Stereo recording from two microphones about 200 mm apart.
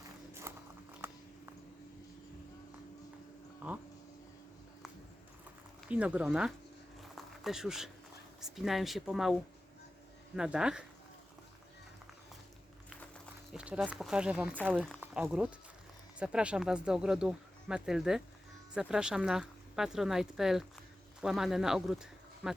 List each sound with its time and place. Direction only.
0.5 s biting: 15° right (ahead or behind)
1.0 s a sound: 10° right (ahead or behind)
3.6 s speech: 10° right (ahead or behind)
5.9 s speech: 5° right (ahead or behind)
7.2 s a sound: centre (ahead or behind)
8.4 s speech: centre (ahead or behind)
10.3 s speech: 5° right (ahead or behind)
13.0 s a sound: centre (ahead or behind)
15.0 s speech: 5° right (ahead or behind)